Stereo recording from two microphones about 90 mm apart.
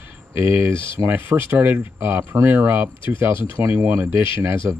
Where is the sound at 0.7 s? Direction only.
70° left (ahead or behind).